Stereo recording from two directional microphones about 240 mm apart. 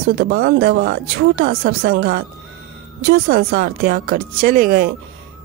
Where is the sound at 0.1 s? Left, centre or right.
Right.